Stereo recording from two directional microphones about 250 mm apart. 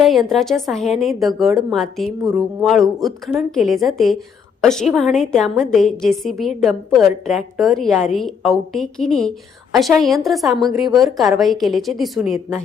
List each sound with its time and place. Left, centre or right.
0.0 s a woman's voice: centre
10.5 s a woman's voice: centre
11.0 s a woman's voice: centre